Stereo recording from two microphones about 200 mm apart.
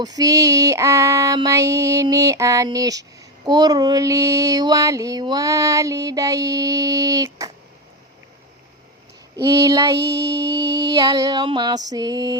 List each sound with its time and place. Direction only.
0.0 s female singing: 20° right (ahead or behind)
9.3 s child singing: 20° right (ahead or behind)